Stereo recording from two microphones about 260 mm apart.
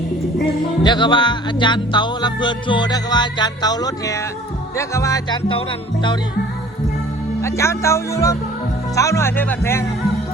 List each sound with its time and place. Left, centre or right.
0.9 s music: centre
7.4 s music: centre